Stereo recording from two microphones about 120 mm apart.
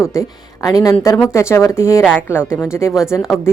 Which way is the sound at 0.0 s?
25° left (ahead or behind).